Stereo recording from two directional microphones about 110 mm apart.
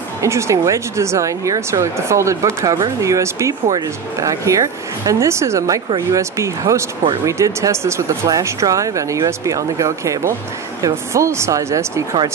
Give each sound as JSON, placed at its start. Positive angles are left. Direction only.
{"t": 0.2, "sound": "speech", "side_deg": -25}